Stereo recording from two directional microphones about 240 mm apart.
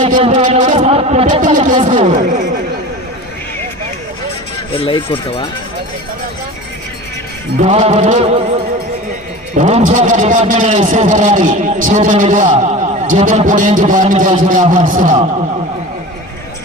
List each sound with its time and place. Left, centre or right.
0.2 s a man's voice: right
4.7 s speech: left
7.6 s music: right
9.6 s a man's voice: right